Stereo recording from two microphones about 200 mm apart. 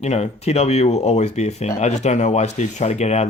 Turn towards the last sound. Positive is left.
turn(degrees=35)  # may be behind; listen again after turning